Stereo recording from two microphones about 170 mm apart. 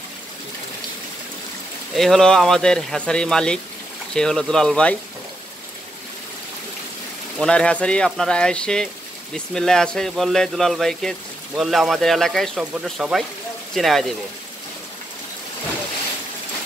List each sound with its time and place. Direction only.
2.0 s speech: centre (ahead or behind)
7.3 s speech: 5° left (ahead or behind)